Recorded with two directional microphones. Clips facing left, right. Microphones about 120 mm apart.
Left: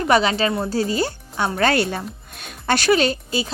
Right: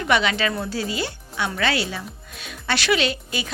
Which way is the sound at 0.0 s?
35° left (ahead or behind).